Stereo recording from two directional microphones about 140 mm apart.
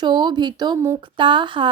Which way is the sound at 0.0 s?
35° right (ahead or behind).